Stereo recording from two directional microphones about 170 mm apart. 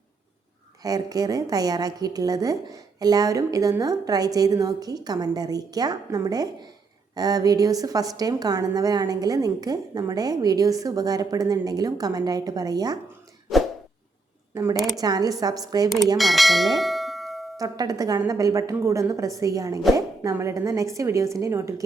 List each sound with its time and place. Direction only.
0.8 s a woman's voice: 20° right (ahead or behind)
14.5 s a woman's voice: 20° right (ahead or behind)
16.1 s bell: centre (ahead or behind)
17.6 s a woman's voice: 20° right (ahead or behind)